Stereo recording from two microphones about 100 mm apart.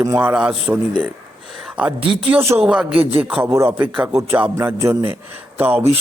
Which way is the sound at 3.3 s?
15° right (ahead or behind).